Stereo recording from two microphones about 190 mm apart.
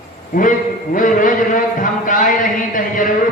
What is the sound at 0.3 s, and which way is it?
A man's voice, 45° left (ahead or behind).